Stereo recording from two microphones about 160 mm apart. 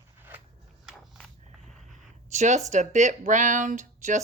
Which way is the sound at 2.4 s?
45° right (ahead or behind).